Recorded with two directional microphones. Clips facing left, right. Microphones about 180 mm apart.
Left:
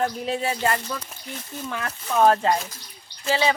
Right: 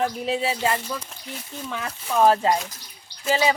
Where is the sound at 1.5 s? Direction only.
Centre (ahead or behind).